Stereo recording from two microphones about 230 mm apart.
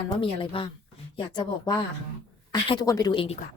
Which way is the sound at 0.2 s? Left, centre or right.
Left.